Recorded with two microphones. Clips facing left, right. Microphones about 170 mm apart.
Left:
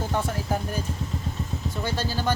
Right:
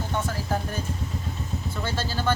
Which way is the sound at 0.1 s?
30° left (ahead or behind).